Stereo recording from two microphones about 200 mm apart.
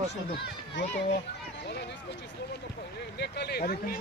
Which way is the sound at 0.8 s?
65° left (ahead or behind).